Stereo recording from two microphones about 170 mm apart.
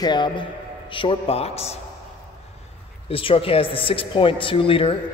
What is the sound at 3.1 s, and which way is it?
A woman's voice, 35° left (ahead or behind).